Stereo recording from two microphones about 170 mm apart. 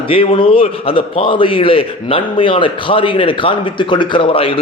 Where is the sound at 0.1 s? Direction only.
30° left (ahead or behind).